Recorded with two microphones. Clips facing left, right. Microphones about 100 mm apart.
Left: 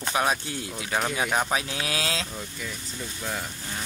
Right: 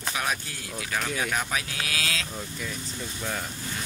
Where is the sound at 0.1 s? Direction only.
30° left (ahead or behind).